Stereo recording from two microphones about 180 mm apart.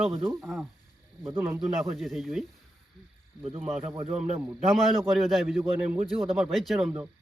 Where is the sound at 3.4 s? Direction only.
35° right (ahead or behind).